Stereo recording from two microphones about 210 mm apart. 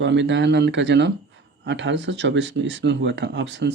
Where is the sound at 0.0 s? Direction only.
60° right (ahead or behind).